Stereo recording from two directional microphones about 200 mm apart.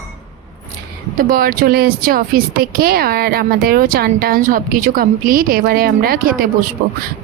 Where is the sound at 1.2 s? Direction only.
45° right (ahead or behind).